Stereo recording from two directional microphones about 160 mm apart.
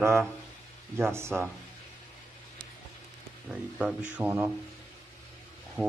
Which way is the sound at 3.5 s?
10° right (ahead or behind).